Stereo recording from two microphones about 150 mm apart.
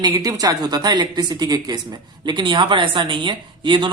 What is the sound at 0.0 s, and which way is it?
Speech, 25° right (ahead or behind).